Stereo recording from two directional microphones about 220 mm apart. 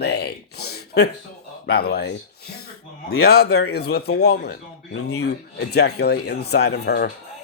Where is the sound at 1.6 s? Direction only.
45° left (ahead or behind).